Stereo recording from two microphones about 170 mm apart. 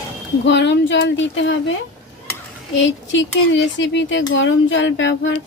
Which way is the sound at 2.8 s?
90° left.